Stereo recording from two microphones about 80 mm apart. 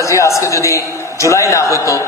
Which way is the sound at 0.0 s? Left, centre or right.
Left.